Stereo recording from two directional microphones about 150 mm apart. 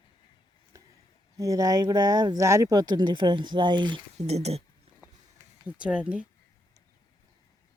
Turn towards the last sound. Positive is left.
turn(degrees=-10)  # may be behind; listen again after turning